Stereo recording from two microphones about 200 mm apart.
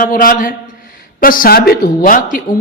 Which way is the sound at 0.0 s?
45° left (ahead or behind).